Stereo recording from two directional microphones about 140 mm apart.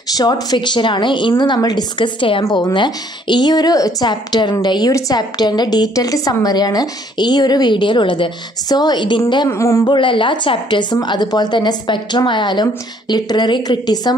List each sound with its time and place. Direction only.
0.2 s a woman's voice: 30° left (ahead or behind)
9.5 s a woman's voice: 20° left (ahead or behind)
9.9 s a woman's voice: 35° left (ahead or behind)